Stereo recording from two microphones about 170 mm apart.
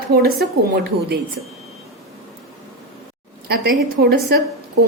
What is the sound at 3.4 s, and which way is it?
Speech, 60° right (ahead or behind).